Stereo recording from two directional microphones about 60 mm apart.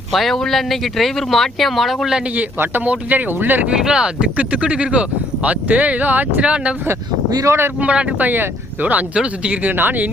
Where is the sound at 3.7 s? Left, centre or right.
Centre.